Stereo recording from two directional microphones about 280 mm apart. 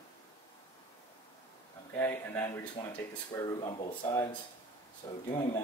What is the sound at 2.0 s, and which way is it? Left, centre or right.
Speech, centre.